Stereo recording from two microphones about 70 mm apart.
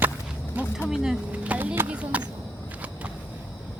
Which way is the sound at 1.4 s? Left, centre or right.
Right.